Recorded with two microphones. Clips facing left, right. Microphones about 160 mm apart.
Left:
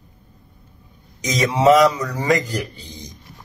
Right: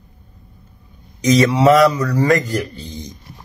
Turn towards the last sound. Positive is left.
turn(degrees=15)  # may be behind; listen again after turning